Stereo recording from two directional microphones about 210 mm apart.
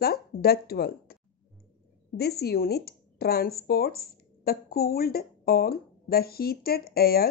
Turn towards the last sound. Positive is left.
turn(degrees=45)  # may be behind; listen again after turning